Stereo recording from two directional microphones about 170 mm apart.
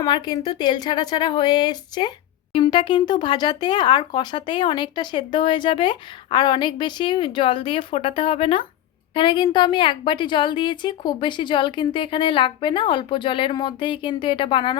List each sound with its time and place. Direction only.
0.0 s a woman's voice: 25° left (ahead or behind)